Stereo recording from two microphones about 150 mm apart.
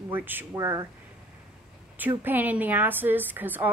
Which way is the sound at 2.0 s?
15° right (ahead or behind).